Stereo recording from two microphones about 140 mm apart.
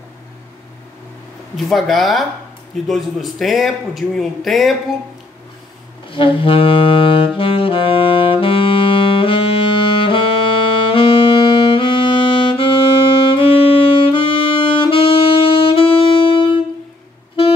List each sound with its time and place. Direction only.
1.6 s a man's voice: centre (ahead or behind)
6.0 s saxophone: 40° left (ahead or behind)
10.9 s music: 40° left (ahead or behind)
13.3 s saxophone: 40° left (ahead or behind)